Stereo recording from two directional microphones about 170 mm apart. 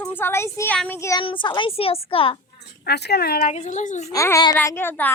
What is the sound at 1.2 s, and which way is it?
A woman's voice, 30° left (ahead or behind).